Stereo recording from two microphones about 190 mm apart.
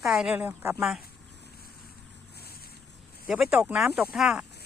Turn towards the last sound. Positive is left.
turn(degrees=-5)  # may be behind; listen again after turning